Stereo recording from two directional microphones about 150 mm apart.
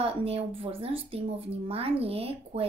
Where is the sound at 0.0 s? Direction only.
40° right (ahead or behind).